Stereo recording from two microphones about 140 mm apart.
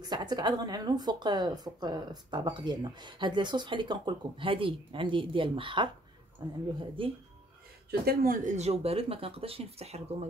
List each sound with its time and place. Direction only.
0.0 s speech: 30° right (ahead or behind)
7.0 s speech: 40° right (ahead or behind)
8.0 s speech: 90° right
8.5 s speech: 45° right (ahead or behind)